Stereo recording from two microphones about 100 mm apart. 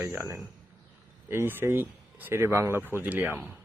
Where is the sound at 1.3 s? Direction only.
25° right (ahead or behind).